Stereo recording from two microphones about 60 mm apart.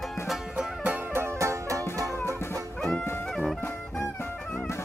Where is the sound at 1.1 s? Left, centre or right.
Right.